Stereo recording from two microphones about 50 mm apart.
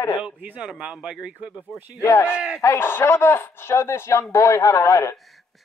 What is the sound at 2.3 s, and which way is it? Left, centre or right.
Speech, centre.